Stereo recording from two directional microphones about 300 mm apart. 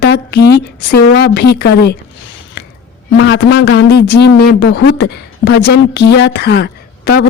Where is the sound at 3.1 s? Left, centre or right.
Left.